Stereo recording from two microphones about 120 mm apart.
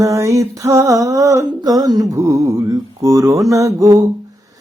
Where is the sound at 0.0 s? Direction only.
25° right (ahead or behind).